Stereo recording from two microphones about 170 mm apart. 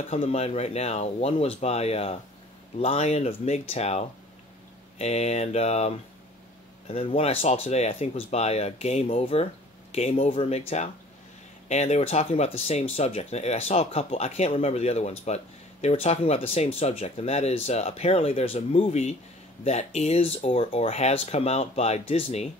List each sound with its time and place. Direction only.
0.1 s speech: 40° left (ahead or behind)
11.7 s speech: 40° left (ahead or behind)